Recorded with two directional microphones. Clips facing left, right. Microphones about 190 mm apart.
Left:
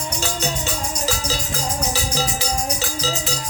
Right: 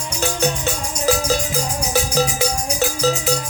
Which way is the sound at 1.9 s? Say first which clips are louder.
Right 5 dB; 55° right (ahead or behind).